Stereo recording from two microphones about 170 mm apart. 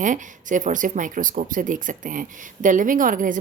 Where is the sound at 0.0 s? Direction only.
50° right (ahead or behind).